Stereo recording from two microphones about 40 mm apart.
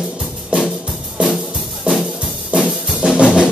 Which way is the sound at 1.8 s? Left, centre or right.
Centre.